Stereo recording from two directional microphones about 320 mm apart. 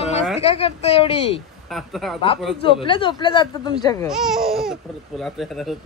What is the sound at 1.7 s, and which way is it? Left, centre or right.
Speech, centre.